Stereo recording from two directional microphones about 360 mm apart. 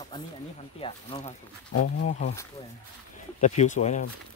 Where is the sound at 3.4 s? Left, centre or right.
Centre.